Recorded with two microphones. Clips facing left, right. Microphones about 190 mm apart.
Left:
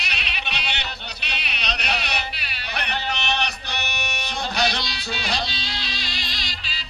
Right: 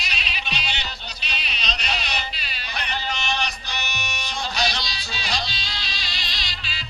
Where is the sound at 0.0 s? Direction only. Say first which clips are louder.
Left 1 dB; 60° left (ahead or behind); by 6.8 s 40° left (ahead or behind).